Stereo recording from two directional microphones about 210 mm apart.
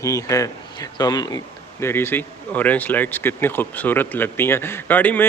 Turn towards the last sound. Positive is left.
turn(degrees=10)  # may be behind; listen again after turning